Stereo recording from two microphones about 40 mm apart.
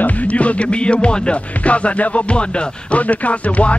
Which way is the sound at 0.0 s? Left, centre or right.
Left.